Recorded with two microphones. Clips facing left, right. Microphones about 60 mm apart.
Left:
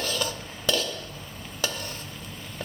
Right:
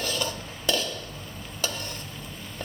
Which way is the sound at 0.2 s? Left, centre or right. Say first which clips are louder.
Even; centre.